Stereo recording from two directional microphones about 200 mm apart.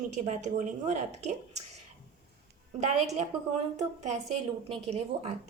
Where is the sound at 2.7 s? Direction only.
35° right (ahead or behind).